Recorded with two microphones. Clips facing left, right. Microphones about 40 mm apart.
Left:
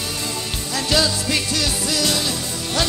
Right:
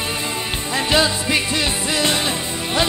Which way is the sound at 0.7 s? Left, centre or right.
Right.